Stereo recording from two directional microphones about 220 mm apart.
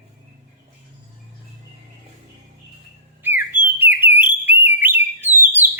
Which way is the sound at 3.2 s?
10° right (ahead or behind).